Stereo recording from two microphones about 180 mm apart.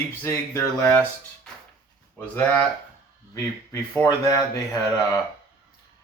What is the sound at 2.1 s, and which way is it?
Speech, 10° left (ahead or behind).